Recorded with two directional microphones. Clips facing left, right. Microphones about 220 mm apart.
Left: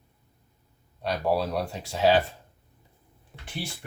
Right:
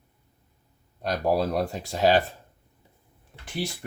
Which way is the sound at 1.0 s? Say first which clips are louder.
Right 1 dB; 45° right (ahead or behind).